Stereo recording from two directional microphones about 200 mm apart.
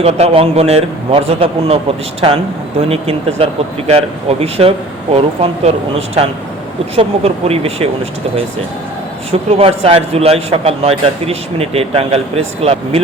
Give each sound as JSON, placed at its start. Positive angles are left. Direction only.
{"t": 0.0, "sound": "a man's voice", "side_deg": -30}
{"t": 2.9, "sound": "a man's voice", "side_deg": -30}
{"t": 6.9, "sound": "speech", "side_deg": -30}
{"t": 9.3, "sound": "a man's voice", "side_deg": -30}